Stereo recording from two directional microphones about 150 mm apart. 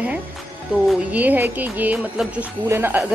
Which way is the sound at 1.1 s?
10° right (ahead or behind).